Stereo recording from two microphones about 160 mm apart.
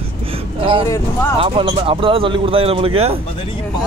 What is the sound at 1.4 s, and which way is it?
Speech, 35° right (ahead or behind).